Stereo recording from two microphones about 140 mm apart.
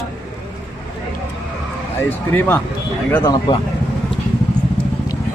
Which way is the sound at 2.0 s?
15° left (ahead or behind).